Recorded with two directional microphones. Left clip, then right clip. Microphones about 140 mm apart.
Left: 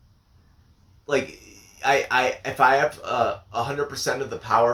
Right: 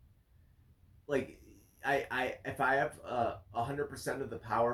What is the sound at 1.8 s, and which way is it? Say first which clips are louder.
Speech: left 13 dB; 15° left (ahead or behind).